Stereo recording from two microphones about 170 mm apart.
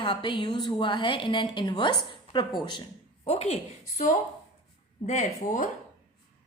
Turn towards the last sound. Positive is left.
turn(degrees=50)  # may be behind; listen again after turning